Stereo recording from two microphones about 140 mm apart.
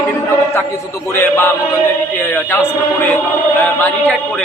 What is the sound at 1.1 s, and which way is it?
Speech, 15° left (ahead or behind).